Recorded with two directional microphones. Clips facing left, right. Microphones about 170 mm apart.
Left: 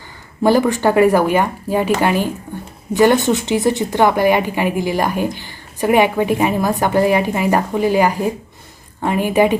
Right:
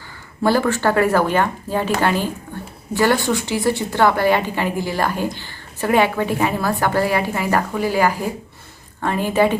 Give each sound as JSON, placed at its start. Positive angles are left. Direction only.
{"t": 0.4, "sound": "a woman's voice", "side_deg": 15}